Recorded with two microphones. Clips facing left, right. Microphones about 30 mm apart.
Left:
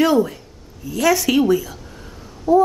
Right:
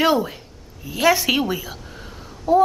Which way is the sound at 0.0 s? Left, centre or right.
Right.